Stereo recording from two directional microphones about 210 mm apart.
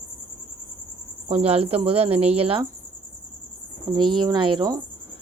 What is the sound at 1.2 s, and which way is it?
Speech, 30° right (ahead or behind).